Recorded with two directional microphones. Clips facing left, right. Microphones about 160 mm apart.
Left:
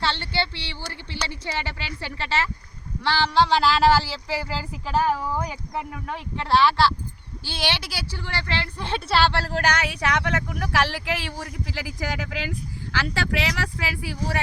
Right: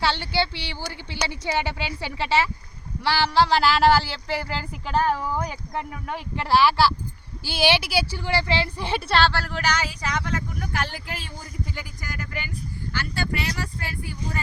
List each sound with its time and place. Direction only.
0.0 s speech: 10° right (ahead or behind)
9.3 s speech: 30° left (ahead or behind)
9.6 s speech: 60° left (ahead or behind); by 14.4 s 80° left